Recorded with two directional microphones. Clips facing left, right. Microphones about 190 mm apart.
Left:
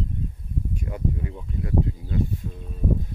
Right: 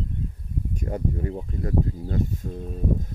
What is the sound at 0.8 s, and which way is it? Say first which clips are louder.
Speech: right 3 dB; 40° right (ahead or behind).